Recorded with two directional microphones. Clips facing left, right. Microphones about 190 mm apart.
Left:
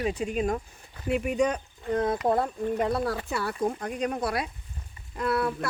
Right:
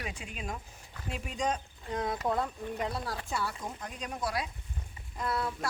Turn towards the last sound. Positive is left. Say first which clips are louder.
# left 7 dB
turn(degrees=65)  # may be behind; listen again after turning